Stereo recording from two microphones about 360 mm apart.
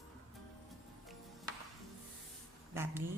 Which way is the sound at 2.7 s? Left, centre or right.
Centre.